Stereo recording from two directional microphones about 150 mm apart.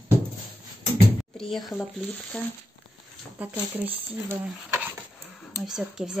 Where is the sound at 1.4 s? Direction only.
Centre (ahead or behind).